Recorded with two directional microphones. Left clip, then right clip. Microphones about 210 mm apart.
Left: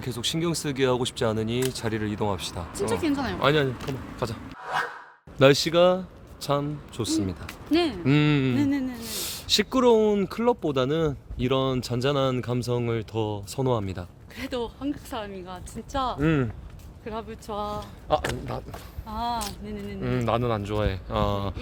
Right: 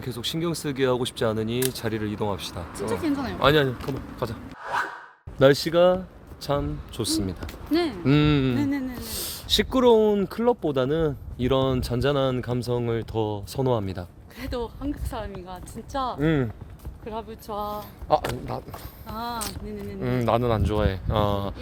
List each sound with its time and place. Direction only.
0.0 s speech: centre (ahead or behind)
2.7 s speech: 20° left (ahead or behind)
3.4 s speech: 20° right (ahead or behind)
3.8 s speech: centre (ahead or behind)
5.4 s speech: centre (ahead or behind)
7.0 s speech: 10° right (ahead or behind)
7.7 s speech: 5° left (ahead or behind)
8.0 s speech: 15° right (ahead or behind)
8.5 s a sound: 5° left (ahead or behind)
9.0 s speech: 10° right (ahead or behind)
14.3 s speech: 10° left (ahead or behind)
18.1 s speech: 25° right (ahead or behind)
18.7 s speech: centre (ahead or behind)
20.0 s speech: 30° right (ahead or behind)